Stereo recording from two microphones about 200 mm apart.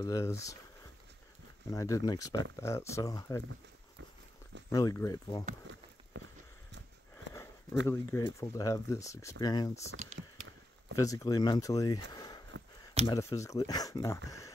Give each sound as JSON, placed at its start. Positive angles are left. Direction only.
{"t": 0.0, "sound": "speech", "side_deg": 15}
{"t": 1.7, "sound": "speech", "side_deg": 15}
{"t": 4.6, "sound": "speech", "side_deg": 15}
{"t": 6.1, "sound": "a sound", "side_deg": -65}
{"t": 7.8, "sound": "speech", "side_deg": 10}
{"t": 10.2, "sound": "a sound", "side_deg": -65}
{"t": 11.0, "sound": "speech", "side_deg": 15}